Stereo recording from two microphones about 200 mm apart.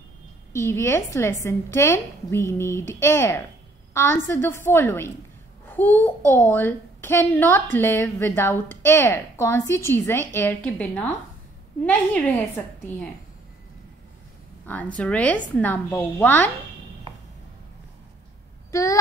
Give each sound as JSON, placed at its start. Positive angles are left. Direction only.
{"t": 0.5, "sound": "a child's voice", "side_deg": 15}
{"t": 15.0, "sound": "a child's voice", "side_deg": 5}
{"t": 18.7, "sound": "speech", "side_deg": 15}